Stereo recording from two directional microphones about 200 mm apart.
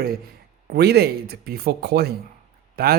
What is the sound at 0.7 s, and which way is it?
Speech, 55° right (ahead or behind).